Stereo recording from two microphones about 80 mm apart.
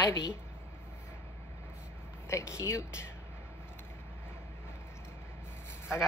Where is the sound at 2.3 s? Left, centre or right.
Left.